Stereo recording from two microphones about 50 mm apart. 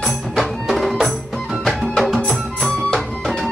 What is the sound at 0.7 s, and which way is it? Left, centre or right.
Music, centre.